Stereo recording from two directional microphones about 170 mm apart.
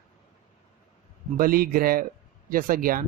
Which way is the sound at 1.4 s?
60° right (ahead or behind).